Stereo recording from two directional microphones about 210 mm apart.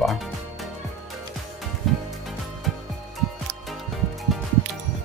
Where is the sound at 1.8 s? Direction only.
Centre (ahead or behind).